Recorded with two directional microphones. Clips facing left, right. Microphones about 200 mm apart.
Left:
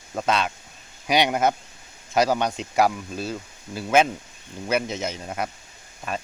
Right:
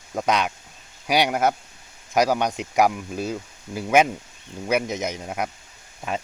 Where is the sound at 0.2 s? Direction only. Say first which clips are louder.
Right 1 dB; 15° right (ahead or behind).